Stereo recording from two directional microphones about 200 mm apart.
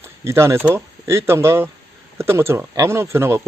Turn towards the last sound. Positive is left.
turn(degrees=-15)  # may be behind; listen again after turning